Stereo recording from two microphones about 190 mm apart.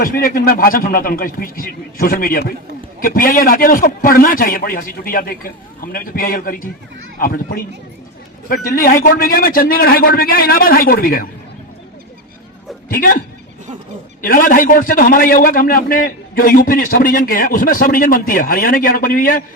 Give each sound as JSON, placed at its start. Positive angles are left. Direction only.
{"t": 0.0, "sound": "a man's voice", "side_deg": 45}
{"t": 12.9, "sound": "a man's voice", "side_deg": 45}